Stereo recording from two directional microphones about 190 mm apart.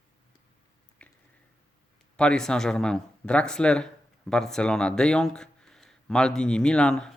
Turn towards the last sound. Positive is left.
turn(degrees=5)  # may be behind; listen again after turning